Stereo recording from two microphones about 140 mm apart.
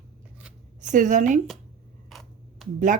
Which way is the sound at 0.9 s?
65° right (ahead or behind).